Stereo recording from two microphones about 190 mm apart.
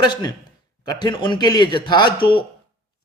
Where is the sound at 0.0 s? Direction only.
20° left (ahead or behind).